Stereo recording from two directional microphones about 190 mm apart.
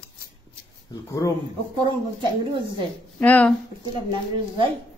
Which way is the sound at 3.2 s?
5° left (ahead or behind).